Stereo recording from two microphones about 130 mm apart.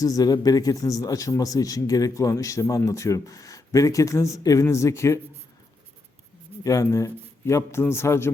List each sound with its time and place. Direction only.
0.0 s speech: 30° left (ahead or behind)
6.7 s speech: 25° left (ahead or behind)